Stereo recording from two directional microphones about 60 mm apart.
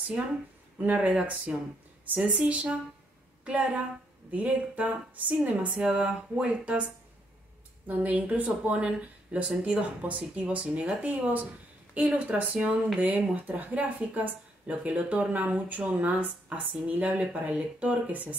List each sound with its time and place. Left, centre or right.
0.7 s speech: right